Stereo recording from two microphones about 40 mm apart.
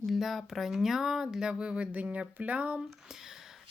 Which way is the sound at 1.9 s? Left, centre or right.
Right.